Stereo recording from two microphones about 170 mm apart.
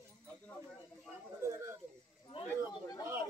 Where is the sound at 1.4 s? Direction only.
15° right (ahead or behind).